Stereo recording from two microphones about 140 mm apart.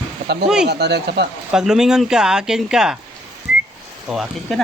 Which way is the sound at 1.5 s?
5° right (ahead or behind).